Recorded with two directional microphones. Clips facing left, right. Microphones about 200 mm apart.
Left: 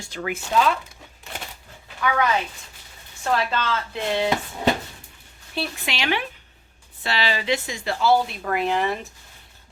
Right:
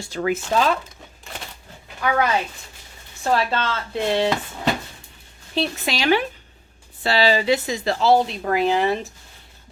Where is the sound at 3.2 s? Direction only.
35° right (ahead or behind).